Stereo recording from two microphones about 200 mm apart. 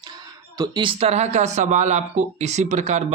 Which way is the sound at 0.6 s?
25° right (ahead or behind).